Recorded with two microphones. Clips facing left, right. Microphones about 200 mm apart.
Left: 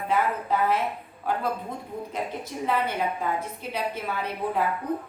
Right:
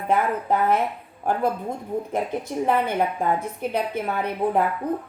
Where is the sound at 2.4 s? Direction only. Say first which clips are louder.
Right 3 dB; 50° right (ahead or behind).